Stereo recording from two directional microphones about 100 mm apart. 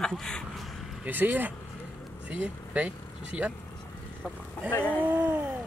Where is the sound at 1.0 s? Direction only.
20° right (ahead or behind).